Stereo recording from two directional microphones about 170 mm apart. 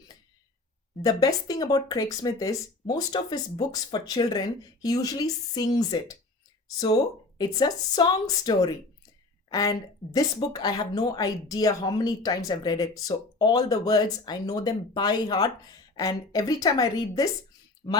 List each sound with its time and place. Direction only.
1.0 s a woman's voice: 25° left (ahead or behind)